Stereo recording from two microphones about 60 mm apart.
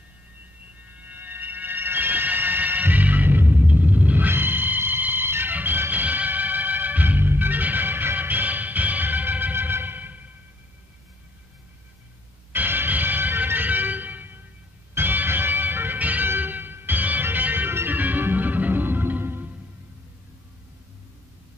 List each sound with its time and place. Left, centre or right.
0.8 s music: right
12.5 s music: right